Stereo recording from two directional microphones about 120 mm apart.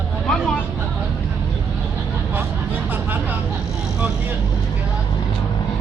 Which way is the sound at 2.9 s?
15° right (ahead or behind).